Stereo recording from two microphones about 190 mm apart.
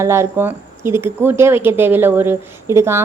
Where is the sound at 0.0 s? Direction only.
15° right (ahead or behind).